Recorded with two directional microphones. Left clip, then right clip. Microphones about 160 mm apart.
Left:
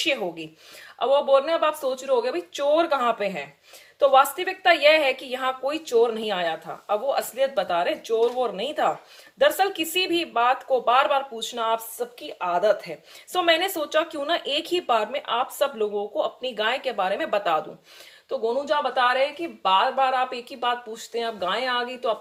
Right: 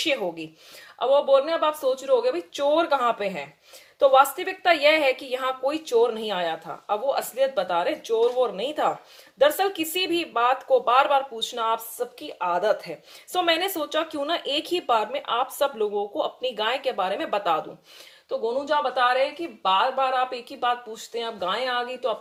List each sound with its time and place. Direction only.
0.0 s a woman's voice: 30° right (ahead or behind)